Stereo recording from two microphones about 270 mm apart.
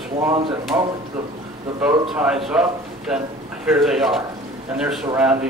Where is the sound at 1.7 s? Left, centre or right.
Centre.